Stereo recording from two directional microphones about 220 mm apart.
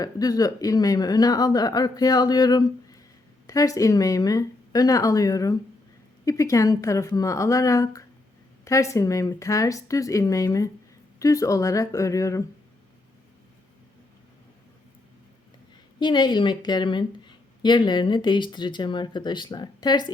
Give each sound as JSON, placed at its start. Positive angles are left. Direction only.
{"t": 0.0, "sound": "speech", "side_deg": 15}
{"t": 16.0, "sound": "a woman's voice", "side_deg": 20}